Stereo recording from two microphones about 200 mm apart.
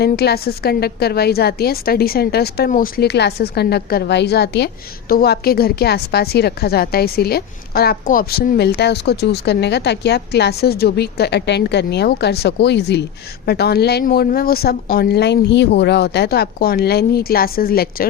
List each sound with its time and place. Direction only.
0.0 s a woman's voice: 55° left (ahead or behind)